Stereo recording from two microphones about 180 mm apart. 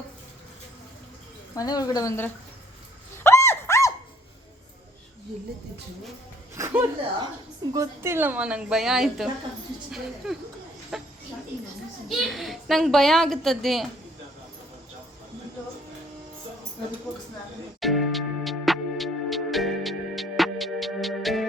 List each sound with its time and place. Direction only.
1.5 s speech: 20° left (ahead or behind)
3.2 s a sound: 15° left (ahead or behind)
6.6 s a woman's voice: 15° right (ahead or behind); by 13.8 s centre (ahead or behind)
17.7 s music: centre (ahead or behind)